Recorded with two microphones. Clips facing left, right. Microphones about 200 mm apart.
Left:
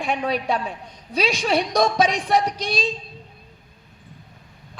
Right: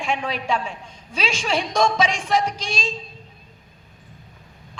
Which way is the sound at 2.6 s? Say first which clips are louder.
Left 4 dB; 60° left (ahead or behind).